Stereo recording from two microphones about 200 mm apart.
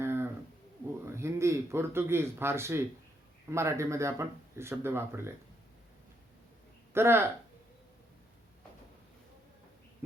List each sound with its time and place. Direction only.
0.0 s a sound: 10° right (ahead or behind)
1.0 s speech: 15° right (ahead or behind)
6.9 s speech: 10° right (ahead or behind)